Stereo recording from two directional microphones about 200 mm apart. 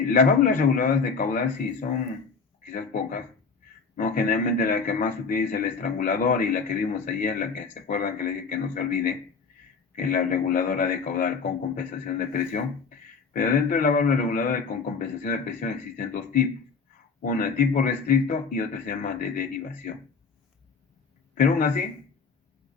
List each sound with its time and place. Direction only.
0.0 s a man's voice: 40° left (ahead or behind)
21.3 s a man's voice: 45° left (ahead or behind)